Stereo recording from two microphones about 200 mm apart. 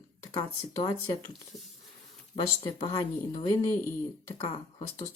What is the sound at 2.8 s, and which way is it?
Speech, 20° left (ahead or behind).